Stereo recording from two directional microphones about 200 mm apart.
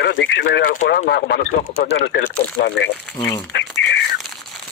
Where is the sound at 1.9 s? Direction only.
70° left (ahead or behind).